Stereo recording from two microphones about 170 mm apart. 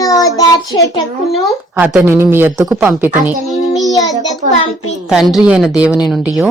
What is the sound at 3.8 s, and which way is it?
Child singing, 20° left (ahead or behind).